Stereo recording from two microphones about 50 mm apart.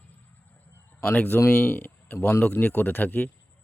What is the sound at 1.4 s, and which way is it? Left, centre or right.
Speech, left.